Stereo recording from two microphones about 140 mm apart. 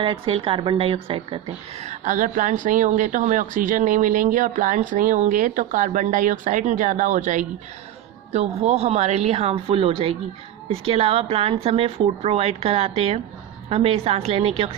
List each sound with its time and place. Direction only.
0.0 s a woman's voice: 40° right (ahead or behind); by 7.4 s 65° right (ahead or behind)
8.3 s speech: 55° right (ahead or behind)